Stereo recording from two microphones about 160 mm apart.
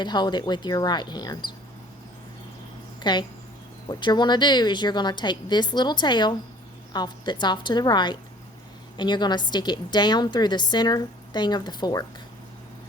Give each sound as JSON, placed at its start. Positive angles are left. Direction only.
{"t": 0.0, "sound": "a woman's voice", "side_deg": 30}
{"t": 3.0, "sound": "a woman's voice", "side_deg": 30}